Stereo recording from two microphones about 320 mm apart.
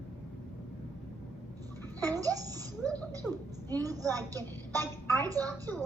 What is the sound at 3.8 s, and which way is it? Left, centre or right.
Speech, centre.